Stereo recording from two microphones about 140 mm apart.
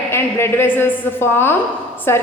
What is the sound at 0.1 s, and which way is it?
A woman's voice, 15° left (ahead or behind).